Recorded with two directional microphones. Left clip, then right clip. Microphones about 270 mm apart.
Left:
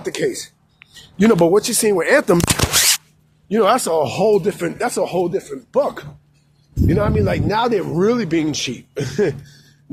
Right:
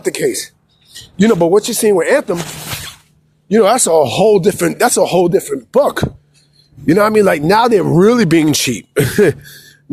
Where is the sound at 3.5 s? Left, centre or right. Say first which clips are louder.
Right 5 dB; right.